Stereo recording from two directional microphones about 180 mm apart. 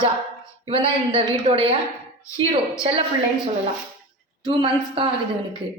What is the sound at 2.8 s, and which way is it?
Speech, 30° right (ahead or behind).